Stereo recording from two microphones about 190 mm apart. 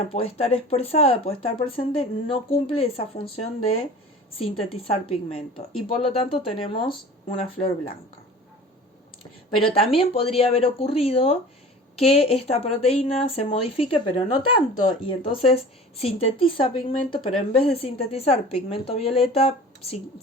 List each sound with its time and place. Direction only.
0.1 s speech: 30° left (ahead or behind)
4.8 s speech: 30° left (ahead or behind)
9.6 s speech: 30° left (ahead or behind)